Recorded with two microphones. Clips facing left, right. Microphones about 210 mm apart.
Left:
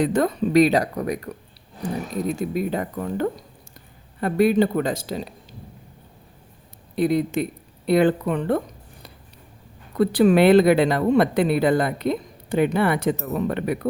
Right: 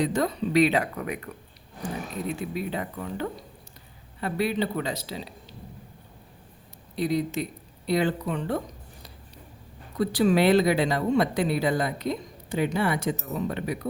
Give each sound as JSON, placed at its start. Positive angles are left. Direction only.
{"t": 0.0, "sound": "speech", "side_deg": 55}
{"t": 6.9, "sound": "speech", "side_deg": 55}
{"t": 10.0, "sound": "speech", "side_deg": 60}